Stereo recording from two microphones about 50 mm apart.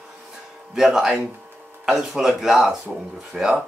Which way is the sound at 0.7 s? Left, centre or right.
Centre.